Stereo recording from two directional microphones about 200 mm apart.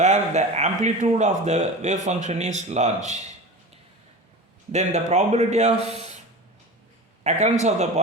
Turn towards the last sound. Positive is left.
turn(degrees=-35)  # may be behind; listen again after turning